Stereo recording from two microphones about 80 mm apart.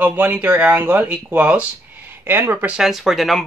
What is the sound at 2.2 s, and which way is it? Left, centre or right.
Speech, right.